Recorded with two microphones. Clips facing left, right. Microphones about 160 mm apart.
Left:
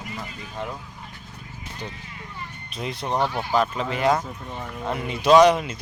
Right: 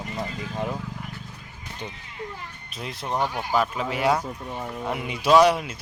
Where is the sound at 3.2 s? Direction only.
10° right (ahead or behind).